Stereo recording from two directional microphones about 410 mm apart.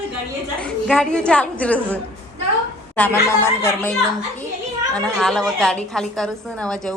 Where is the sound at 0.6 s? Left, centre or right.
Centre.